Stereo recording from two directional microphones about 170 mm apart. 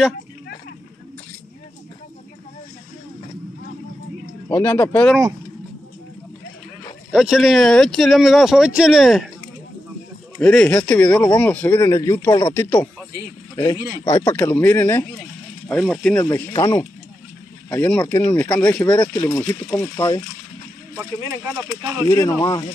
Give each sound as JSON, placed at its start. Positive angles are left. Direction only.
{"t": 4.5, "sound": "a man's voice", "side_deg": 15}
{"t": 7.1, "sound": "speech", "side_deg": -5}
{"t": 10.4, "sound": "a man's voice", "side_deg": 5}
{"t": 14.0, "sound": "a man's voice", "side_deg": 15}
{"t": 16.3, "sound": "a man's voice", "side_deg": 15}
{"t": 21.0, "sound": "speech", "side_deg": -20}
{"t": 22.0, "sound": "speech", "side_deg": 20}